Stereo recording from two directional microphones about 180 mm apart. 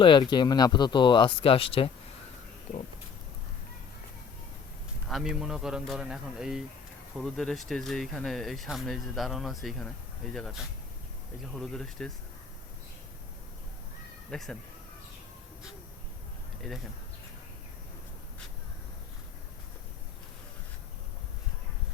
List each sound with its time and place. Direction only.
0.0 s speech: 25° left (ahead or behind)
5.0 s speech: centre (ahead or behind)
14.3 s speech: centre (ahead or behind)